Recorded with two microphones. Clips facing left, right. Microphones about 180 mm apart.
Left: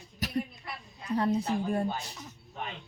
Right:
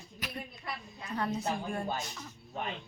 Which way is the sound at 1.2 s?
30° left (ahead or behind).